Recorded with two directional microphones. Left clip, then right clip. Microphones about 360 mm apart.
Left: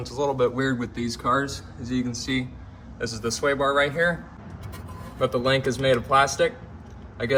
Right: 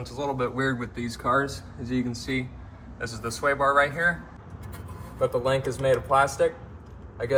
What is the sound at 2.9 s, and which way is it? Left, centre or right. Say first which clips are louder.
Speech: left 4 dB; centre.